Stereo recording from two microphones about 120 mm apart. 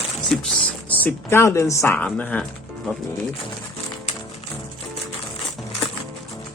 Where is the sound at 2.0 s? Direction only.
10° left (ahead or behind).